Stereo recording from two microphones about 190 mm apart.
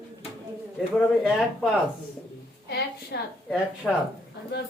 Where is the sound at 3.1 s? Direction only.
60° left (ahead or behind).